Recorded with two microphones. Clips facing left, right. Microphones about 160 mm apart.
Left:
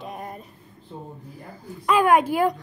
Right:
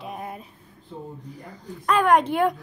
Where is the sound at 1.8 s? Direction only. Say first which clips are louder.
Left 1 dB; 5° left (ahead or behind).